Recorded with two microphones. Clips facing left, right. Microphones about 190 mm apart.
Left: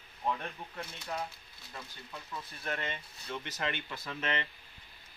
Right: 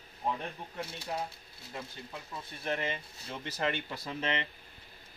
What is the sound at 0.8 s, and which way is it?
Speech, 30° right (ahead or behind).